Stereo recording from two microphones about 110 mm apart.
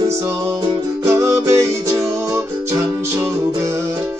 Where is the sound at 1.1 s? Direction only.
25° right (ahead or behind).